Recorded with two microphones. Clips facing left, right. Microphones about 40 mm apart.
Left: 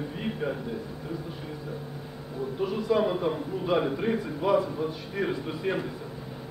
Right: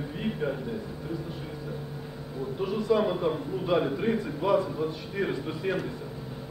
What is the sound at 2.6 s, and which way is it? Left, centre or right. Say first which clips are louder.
A man's voice: even; centre.